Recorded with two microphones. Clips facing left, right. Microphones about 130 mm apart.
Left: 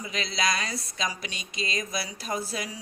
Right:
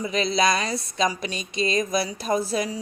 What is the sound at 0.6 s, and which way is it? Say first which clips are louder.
Speech: right 8 dB; 30° right (ahead or behind).